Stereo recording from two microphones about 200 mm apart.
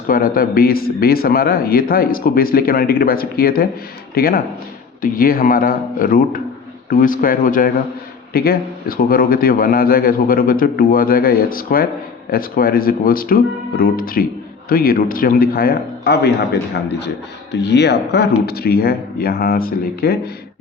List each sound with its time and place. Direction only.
0.1 s a man's voice: 45° left (ahead or behind)